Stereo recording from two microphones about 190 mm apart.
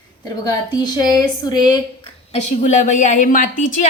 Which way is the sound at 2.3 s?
40° left (ahead or behind).